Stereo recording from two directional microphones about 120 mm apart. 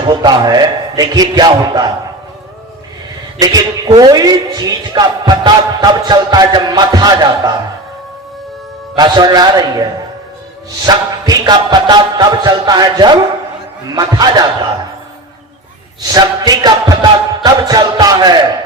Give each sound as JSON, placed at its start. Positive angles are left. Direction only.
{"t": 0.0, "sound": "a woman's voice", "side_deg": -35}
{"t": 3.3, "sound": "a woman's voice", "side_deg": -35}
{"t": 9.0, "sound": "a woman's voice", "side_deg": -35}
{"t": 16.0, "sound": "music", "side_deg": -35}